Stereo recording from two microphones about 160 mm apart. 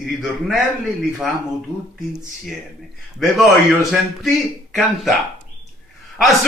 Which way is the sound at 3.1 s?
Centre (ahead or behind).